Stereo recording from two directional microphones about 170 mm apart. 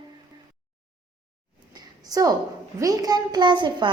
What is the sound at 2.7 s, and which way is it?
A woman's voice, 20° right (ahead or behind).